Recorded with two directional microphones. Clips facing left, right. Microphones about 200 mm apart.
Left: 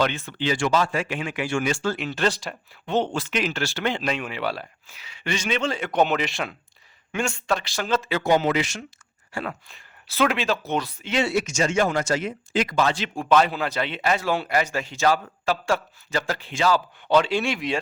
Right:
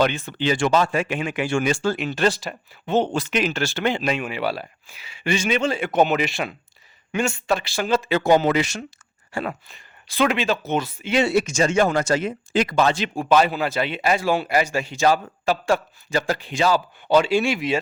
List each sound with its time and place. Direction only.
0.0 s speech: 15° right (ahead or behind)
1.7 s a man's voice: 15° right (ahead or behind)
2.4 s speech: 5° right (ahead or behind)
3.1 s a man's voice: 15° right (ahead or behind)
3.9 s a man's voice: 10° right (ahead or behind)
8.3 s speech: 40° right (ahead or behind)
9.3 s speech: 20° right (ahead or behind)
9.6 s speech: centre (ahead or behind)
11.5 s speech: 35° right (ahead or behind)
13.1 s a man's voice: 5° right (ahead or behind)